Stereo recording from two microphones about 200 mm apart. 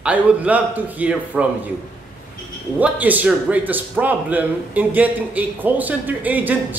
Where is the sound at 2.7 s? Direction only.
10° right (ahead or behind).